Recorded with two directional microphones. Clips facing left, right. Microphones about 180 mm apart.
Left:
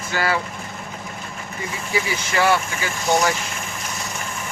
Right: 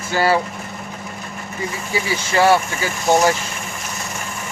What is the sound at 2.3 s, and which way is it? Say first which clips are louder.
Speech: right 5 dB; 30° right (ahead or behind).